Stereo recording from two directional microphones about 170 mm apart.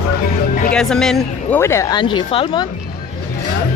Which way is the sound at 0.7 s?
5° left (ahead or behind).